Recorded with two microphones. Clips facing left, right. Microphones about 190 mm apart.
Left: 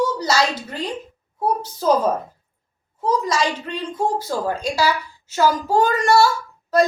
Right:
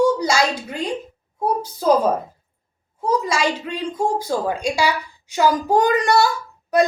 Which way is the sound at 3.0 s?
10° right (ahead or behind).